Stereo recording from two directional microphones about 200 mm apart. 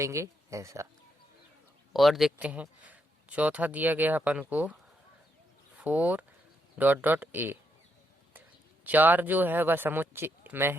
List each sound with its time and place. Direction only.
0.0 s speech: 15° right (ahead or behind)
1.9 s speech: centre (ahead or behind)